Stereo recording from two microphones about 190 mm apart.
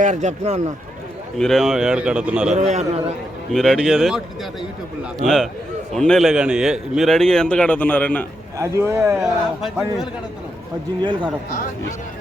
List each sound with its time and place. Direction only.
0.0 s speech: 40° right (ahead or behind)
1.4 s a man's voice: centre (ahead or behind)
2.5 s speech: 35° right (ahead or behind)
3.5 s a man's voice: centre (ahead or behind)
5.2 s a man's voice: centre (ahead or behind)
8.5 s a man's voice: 15° right (ahead or behind)
11.0 s speech: 25° right (ahead or behind)